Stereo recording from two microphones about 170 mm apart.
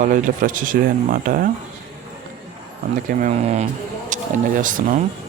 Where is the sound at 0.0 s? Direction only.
50° right (ahead or behind).